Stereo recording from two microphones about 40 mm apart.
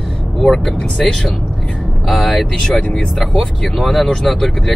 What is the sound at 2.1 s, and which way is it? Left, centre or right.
Speech, centre.